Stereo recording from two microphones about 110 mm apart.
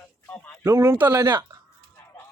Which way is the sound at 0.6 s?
25° right (ahead or behind).